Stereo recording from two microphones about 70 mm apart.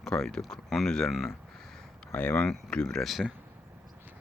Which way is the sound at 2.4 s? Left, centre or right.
Centre.